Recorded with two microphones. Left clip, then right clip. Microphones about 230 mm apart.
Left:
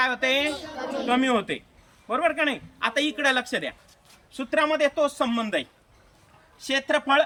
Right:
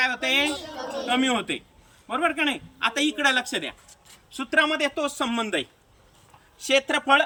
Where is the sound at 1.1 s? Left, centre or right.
Centre.